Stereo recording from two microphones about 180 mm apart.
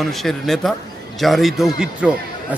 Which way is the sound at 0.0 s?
Centre (ahead or behind).